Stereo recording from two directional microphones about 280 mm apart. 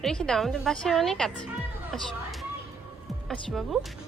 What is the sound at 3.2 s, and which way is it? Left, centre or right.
Speech, centre.